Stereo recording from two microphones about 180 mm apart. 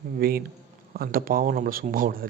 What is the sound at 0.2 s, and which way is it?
Speech, 55° right (ahead or behind).